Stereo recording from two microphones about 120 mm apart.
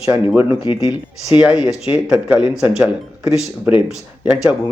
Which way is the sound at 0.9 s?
10° right (ahead or behind).